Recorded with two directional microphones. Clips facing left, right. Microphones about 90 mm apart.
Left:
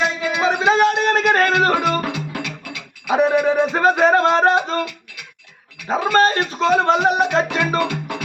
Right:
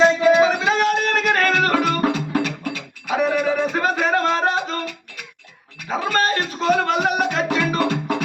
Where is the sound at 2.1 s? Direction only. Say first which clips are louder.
Right 5 dB; 40° right (ahead or behind).